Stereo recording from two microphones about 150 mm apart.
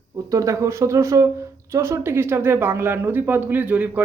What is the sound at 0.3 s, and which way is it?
Speech, 20° right (ahead or behind).